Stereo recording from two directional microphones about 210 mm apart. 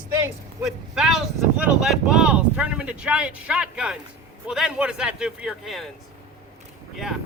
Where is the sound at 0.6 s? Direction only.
Centre (ahead or behind).